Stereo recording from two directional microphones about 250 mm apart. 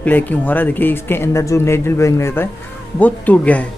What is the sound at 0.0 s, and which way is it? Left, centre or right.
Speech, centre.